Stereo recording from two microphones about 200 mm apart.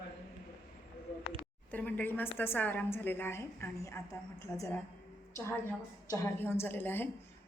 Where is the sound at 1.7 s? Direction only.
10° left (ahead or behind).